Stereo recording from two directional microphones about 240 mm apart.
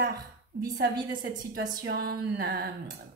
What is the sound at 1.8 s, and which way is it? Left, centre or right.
Speech, right.